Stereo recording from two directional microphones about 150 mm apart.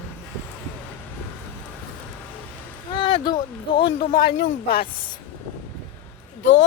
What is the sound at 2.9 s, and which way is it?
Speech, 35° left (ahead or behind).